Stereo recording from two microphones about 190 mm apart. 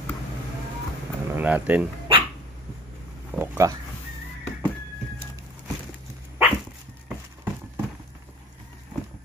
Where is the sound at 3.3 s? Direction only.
10° right (ahead or behind).